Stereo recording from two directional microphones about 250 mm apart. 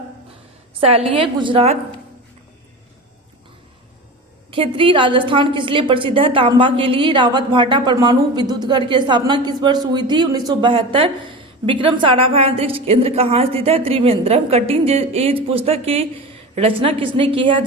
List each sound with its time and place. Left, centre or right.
0.8 s speech: right
4.5 s speech: right